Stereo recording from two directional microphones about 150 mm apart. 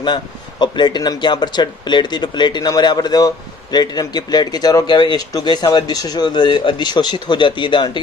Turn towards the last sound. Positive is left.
turn(degrees=35)  # may be behind; listen again after turning